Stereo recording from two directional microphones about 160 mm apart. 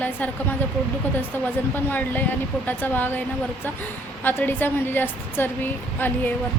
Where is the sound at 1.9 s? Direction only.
10° left (ahead or behind).